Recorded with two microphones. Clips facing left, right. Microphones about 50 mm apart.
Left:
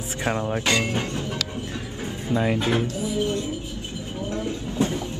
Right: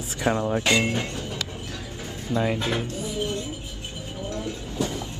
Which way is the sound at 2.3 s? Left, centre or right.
Left.